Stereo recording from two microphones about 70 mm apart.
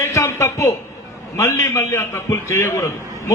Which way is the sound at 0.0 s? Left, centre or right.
Left.